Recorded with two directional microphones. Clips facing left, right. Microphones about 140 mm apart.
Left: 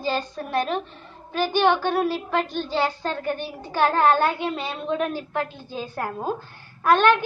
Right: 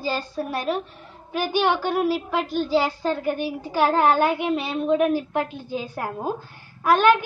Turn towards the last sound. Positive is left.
turn(degrees=-10)  # may be behind; listen again after turning